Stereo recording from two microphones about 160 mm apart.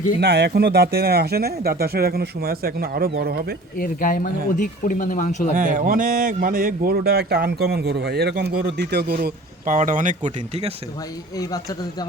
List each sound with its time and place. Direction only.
0.2 s speech: 90° right; by 3.4 s 75° right (ahead or behind)
3.8 s speech: 60° left (ahead or behind)
5.5 s speech: 55° right (ahead or behind)
11.3 s speech: 20° left (ahead or behind)